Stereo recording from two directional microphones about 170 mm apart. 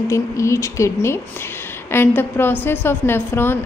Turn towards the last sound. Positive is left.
turn(degrees=15)  # may be behind; listen again after turning